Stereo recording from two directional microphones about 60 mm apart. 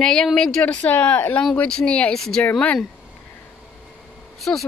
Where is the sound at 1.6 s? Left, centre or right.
Centre.